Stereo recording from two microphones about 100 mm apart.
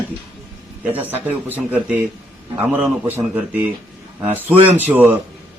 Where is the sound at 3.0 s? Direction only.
15° right (ahead or behind).